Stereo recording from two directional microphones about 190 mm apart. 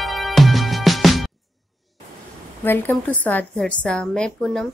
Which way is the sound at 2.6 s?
10° left (ahead or behind).